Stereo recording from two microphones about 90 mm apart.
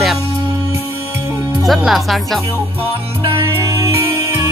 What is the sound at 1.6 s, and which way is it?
Speech, centre (ahead or behind).